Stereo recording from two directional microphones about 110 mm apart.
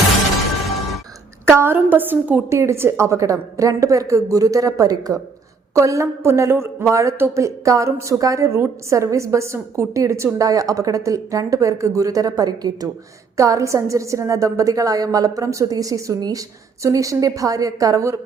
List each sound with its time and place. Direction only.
1.5 s a woman's voice: 20° right (ahead or behind)